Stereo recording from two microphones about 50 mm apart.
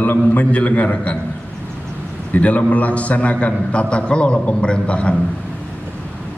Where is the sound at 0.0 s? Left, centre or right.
Left.